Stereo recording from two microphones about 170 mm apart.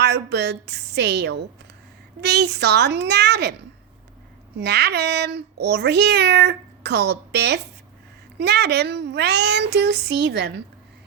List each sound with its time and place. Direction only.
0.0 s speech: 80° right
4.5 s speech: 80° right